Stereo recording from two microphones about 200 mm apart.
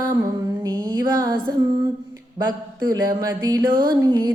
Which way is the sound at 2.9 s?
15° right (ahead or behind).